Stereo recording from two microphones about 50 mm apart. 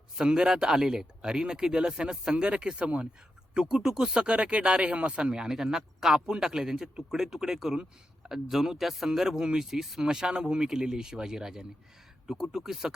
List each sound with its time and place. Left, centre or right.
0.2 s speech: centre